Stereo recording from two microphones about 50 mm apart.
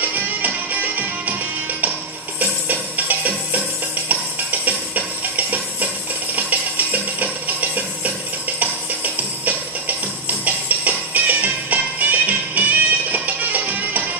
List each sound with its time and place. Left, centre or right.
0.0 s music: right